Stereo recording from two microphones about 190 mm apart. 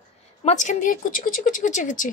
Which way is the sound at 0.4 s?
35° left (ahead or behind).